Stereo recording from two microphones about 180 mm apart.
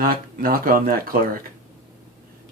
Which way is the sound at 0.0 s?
55° right (ahead or behind).